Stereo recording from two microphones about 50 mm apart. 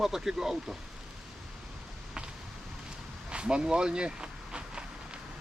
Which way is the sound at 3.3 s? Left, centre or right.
Centre.